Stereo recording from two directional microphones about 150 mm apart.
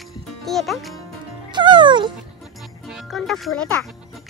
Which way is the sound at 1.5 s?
30° right (ahead or behind).